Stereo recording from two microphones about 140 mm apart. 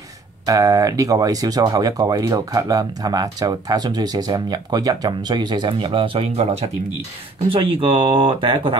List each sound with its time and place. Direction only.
0.5 s speech: 25° right (ahead or behind); by 6.6 s 45° right (ahead or behind)
7.4 s speech: 35° right (ahead or behind)